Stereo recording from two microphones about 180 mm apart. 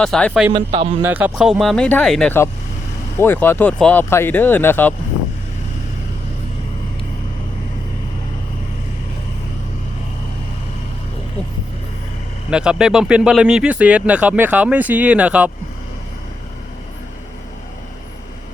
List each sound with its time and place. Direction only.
0.0 s speech: 5° left (ahead or behind)
0.5 s speech: 30° right (ahead or behind)
1.0 s speech: 10° right (ahead or behind); by 4.9 s 10° left (ahead or behind)
12.5 s speech: 5° right (ahead or behind)